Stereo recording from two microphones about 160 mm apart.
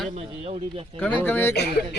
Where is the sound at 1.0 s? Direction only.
10° left (ahead or behind).